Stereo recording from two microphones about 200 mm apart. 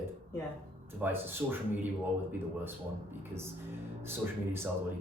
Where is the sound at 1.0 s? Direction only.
10° right (ahead or behind).